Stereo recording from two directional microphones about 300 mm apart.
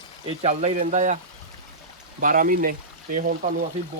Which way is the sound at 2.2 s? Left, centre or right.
Right.